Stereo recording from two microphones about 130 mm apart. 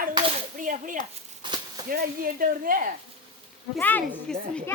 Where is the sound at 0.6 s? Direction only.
90° right.